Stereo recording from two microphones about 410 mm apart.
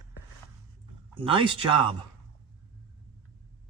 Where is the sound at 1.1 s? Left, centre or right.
Centre.